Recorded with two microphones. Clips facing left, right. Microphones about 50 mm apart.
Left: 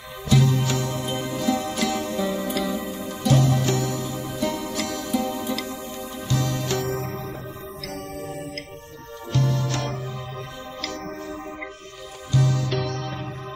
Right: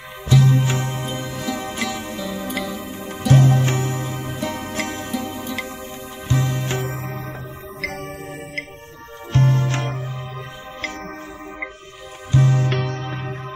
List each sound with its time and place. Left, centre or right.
0.5 s music: right